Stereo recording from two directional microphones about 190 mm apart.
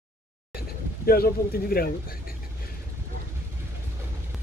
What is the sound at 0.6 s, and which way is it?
Speech, 55° left (ahead or behind).